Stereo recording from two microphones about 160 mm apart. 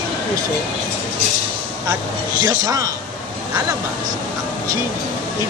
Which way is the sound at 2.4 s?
20° right (ahead or behind).